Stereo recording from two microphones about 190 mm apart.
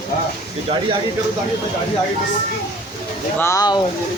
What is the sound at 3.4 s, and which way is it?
Speech, 15° left (ahead or behind).